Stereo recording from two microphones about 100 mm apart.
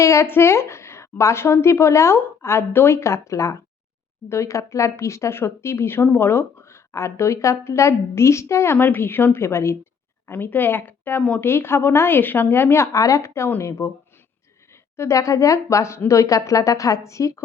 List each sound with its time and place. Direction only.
0.0 s a woman's voice: 30° left (ahead or behind)
14.9 s speech: 30° left (ahead or behind)